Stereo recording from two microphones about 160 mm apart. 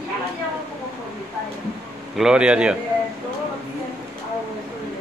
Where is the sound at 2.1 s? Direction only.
5° right (ahead or behind).